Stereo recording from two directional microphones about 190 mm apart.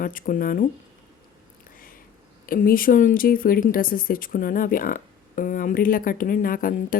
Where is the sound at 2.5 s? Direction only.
50° left (ahead or behind).